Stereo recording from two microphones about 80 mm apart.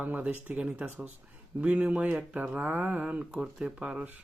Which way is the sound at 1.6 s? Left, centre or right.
Centre.